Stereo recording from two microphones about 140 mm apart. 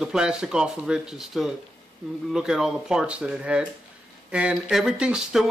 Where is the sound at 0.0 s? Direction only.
5° right (ahead or behind).